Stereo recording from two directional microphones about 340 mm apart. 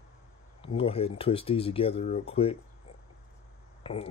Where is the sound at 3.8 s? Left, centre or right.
Centre.